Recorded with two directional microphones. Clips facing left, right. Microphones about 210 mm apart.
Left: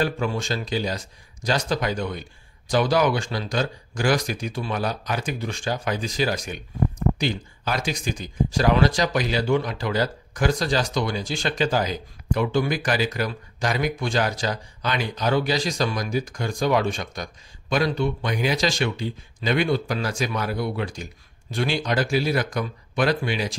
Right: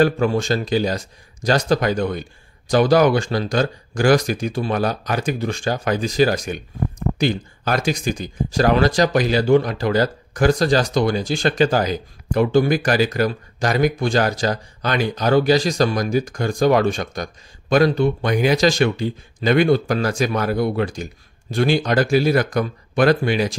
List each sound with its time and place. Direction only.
0.0 s speech: 40° right (ahead or behind)